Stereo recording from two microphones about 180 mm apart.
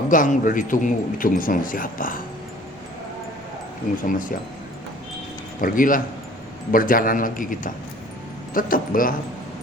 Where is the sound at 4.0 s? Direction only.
45° left (ahead or behind).